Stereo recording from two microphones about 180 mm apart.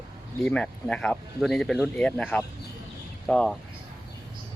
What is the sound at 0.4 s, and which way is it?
Speech, 5° left (ahead or behind).